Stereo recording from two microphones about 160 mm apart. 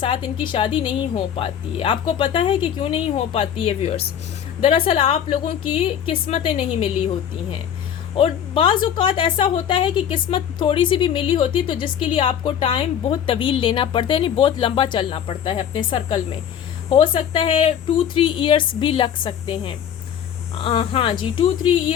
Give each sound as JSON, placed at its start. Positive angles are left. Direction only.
{"t": 0.0, "sound": "a woman's voice", "side_deg": 30}